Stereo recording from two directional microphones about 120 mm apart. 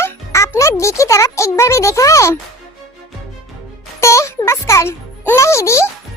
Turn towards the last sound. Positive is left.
turn(degrees=25)  # may be behind; listen again after turning